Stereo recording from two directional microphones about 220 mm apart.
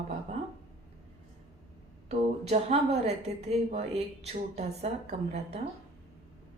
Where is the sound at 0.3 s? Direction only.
30° right (ahead or behind).